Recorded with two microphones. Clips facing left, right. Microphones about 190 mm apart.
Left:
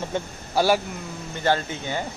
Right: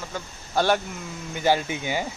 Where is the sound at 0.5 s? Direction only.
5° left (ahead or behind).